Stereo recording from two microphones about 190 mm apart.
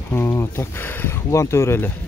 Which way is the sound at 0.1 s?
10° left (ahead or behind).